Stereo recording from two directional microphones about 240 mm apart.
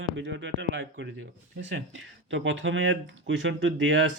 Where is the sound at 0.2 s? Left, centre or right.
Right.